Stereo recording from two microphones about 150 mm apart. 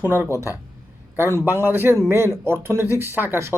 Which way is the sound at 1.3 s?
15° right (ahead or behind).